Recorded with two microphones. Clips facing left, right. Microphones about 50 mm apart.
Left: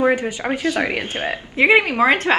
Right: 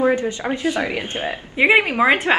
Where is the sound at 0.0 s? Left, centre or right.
Left.